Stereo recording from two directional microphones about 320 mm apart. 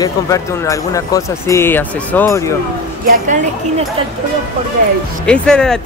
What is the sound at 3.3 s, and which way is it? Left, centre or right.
Speech, right.